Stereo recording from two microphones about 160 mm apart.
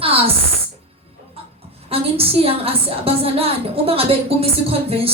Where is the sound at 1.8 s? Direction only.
35° right (ahead or behind).